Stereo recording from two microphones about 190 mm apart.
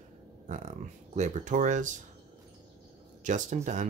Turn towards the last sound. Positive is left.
turn(degrees=-40)  # may be behind; listen again after turning